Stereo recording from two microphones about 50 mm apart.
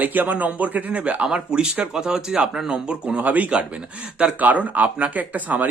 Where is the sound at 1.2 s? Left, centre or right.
Centre.